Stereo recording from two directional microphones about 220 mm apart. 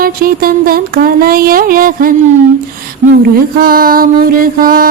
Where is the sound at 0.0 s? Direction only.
40° right (ahead or behind).